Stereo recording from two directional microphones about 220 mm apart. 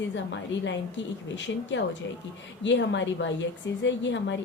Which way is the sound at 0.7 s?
55° left (ahead or behind).